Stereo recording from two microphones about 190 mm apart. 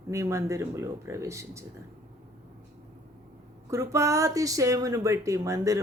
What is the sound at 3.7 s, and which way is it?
Speech, 15° right (ahead or behind).